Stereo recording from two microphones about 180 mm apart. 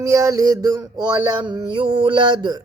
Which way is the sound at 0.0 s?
15° right (ahead or behind).